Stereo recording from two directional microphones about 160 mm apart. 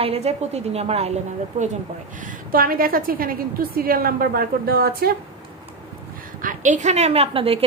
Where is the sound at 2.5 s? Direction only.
65° right (ahead or behind).